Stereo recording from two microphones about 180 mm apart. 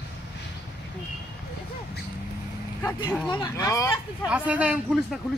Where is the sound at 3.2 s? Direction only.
25° left (ahead or behind).